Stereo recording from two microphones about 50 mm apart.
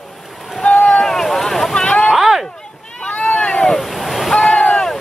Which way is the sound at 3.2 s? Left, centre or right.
Left.